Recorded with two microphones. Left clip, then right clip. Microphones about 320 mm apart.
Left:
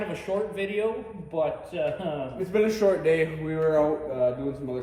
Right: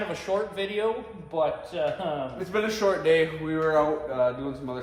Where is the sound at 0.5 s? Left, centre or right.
Right.